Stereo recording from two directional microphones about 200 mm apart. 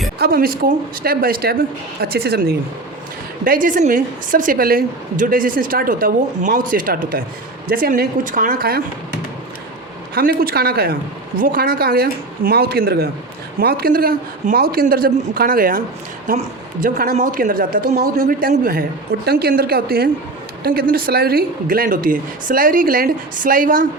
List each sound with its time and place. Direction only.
0.2 s a woman's voice: 45° right (ahead or behind)
10.2 s a woman's voice: 50° right (ahead or behind)